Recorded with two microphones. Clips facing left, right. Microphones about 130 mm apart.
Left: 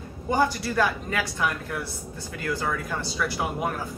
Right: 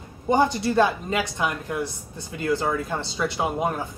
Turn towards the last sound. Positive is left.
turn(degrees=-20)  # may be behind; listen again after turning